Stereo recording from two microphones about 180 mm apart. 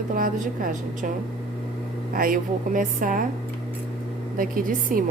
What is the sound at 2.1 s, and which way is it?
A woman's voice, 50° right (ahead or behind).